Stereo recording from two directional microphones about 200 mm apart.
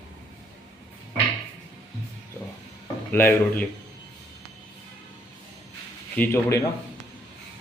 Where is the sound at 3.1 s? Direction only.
10° left (ahead or behind).